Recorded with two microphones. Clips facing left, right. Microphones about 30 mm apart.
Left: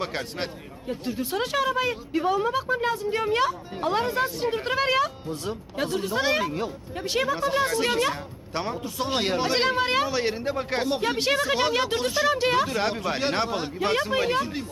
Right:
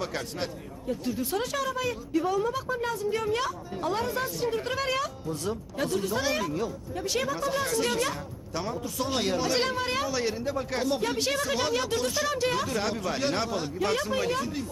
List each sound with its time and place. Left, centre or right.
0.0 s speech: left